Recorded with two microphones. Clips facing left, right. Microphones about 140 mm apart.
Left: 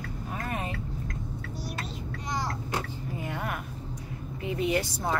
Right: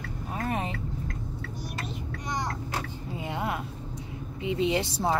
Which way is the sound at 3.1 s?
20° right (ahead or behind).